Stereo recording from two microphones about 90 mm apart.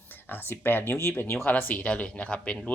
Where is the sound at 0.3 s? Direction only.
25° left (ahead or behind).